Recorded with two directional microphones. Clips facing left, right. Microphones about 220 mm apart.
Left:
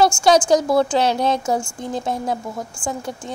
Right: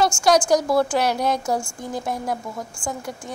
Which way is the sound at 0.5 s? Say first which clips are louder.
Left 2 dB; 25° left (ahead or behind).